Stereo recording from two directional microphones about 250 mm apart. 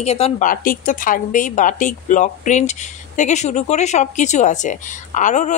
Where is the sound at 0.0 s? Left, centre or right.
Left.